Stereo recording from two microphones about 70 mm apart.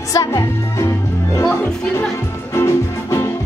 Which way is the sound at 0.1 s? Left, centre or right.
Left.